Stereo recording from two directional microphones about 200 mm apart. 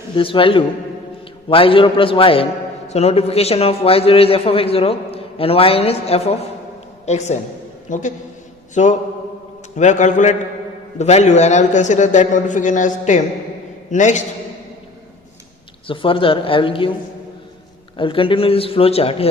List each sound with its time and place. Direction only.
0.2 s a man's voice: 25° left (ahead or behind)
8.7 s mantra: 35° left (ahead or behind)
9.7 s a man's voice: 35° left (ahead or behind)
15.9 s a man's voice: 25° left (ahead or behind)
17.9 s a man's voice: 25° left (ahead or behind)